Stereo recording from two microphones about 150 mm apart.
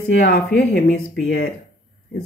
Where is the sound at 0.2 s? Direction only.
80° left.